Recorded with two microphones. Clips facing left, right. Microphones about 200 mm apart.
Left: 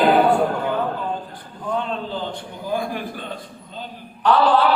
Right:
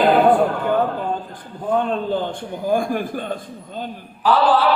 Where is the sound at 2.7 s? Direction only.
50° right (ahead or behind).